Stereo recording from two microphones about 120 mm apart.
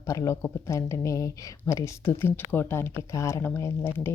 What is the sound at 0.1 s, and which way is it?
Speech, 25° left (ahead or behind).